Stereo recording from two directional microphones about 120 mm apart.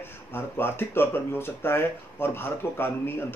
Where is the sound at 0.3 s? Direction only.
20° left (ahead or behind).